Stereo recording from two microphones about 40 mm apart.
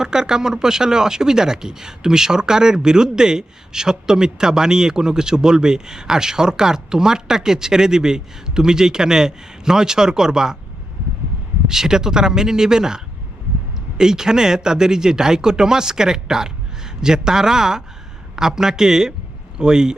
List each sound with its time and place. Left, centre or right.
0.0 s speech: centre
11.7 s speech: centre
14.0 s speech: centre